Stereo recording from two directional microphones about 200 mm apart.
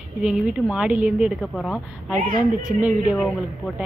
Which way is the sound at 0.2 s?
5° right (ahead or behind).